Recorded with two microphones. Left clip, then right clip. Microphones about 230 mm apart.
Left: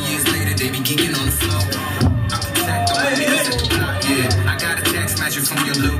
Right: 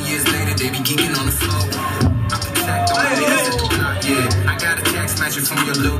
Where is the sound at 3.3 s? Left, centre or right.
Left.